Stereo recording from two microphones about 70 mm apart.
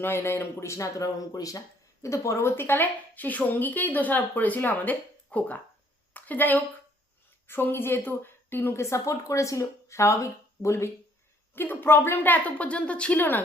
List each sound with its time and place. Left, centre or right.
0.0 s a woman's voice: left
11.5 s speech: left